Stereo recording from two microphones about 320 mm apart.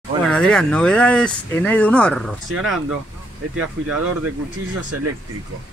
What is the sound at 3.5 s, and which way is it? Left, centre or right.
Speech, right.